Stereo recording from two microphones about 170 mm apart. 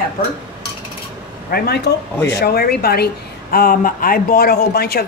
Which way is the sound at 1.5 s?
70° left (ahead or behind).